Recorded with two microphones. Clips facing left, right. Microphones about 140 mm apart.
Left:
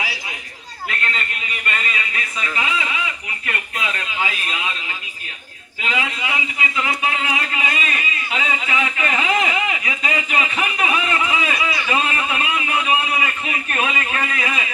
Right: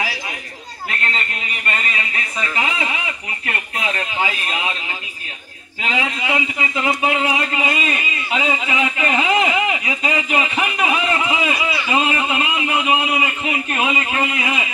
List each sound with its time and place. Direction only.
0.8 s speech: 35° right (ahead or behind)
5.9 s a man's voice: 30° right (ahead or behind)